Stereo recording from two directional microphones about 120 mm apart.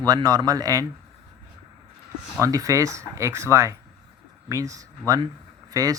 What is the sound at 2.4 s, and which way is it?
Speech, 30° right (ahead or behind).